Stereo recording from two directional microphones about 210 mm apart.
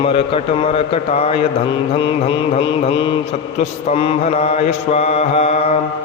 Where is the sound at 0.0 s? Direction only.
25° left (ahead or behind).